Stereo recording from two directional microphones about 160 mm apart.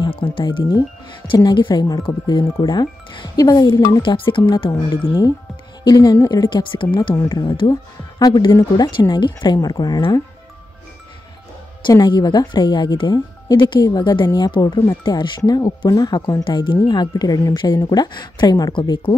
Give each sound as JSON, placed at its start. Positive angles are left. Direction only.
{"t": 0.0, "sound": "speech", "side_deg": 35}
{"t": 11.9, "sound": "speech", "side_deg": 25}